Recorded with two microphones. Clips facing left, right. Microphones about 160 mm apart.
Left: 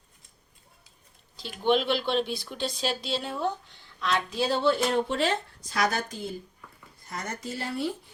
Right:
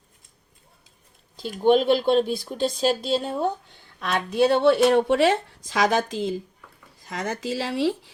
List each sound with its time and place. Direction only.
1.4 s speech: 45° right (ahead or behind); by 8.1 s 90° right